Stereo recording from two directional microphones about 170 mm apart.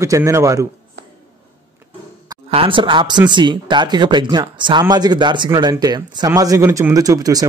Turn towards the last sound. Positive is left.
turn(degrees=-20)  # may be behind; listen again after turning